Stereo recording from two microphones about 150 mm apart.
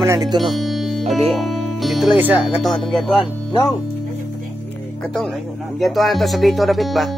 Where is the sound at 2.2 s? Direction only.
10° right (ahead or behind).